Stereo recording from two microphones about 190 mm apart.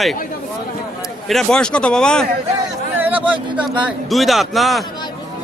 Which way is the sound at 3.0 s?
10° right (ahead or behind).